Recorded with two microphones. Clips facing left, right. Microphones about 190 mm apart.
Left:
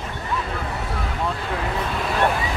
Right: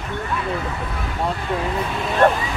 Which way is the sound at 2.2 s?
40° right (ahead or behind).